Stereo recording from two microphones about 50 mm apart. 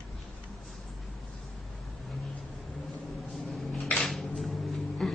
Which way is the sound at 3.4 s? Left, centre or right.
Centre.